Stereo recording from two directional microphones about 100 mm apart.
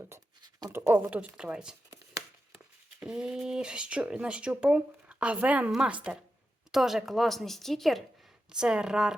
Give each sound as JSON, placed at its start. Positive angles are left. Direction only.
{"t": 0.7, "sound": "speech", "side_deg": -25}
{"t": 3.0, "sound": "a woman's voice", "side_deg": -10}